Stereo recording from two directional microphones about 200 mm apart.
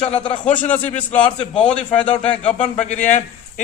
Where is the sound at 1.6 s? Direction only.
5° left (ahead or behind).